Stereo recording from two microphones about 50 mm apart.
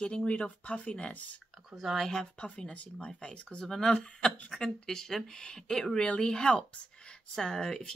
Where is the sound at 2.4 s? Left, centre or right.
Left.